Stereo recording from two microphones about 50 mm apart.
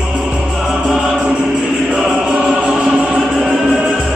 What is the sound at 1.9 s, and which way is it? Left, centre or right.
Choir, centre.